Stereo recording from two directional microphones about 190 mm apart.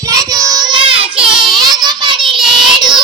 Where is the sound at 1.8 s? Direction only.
20° right (ahead or behind).